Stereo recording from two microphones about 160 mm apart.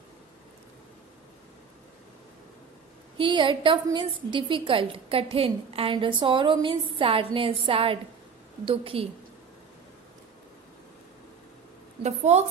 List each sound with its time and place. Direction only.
3.2 s a woman's voice: 30° right (ahead or behind)
12.0 s a woman's voice: 45° right (ahead or behind)